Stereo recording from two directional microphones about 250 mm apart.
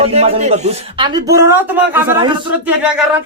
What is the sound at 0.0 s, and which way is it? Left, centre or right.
Speech, right.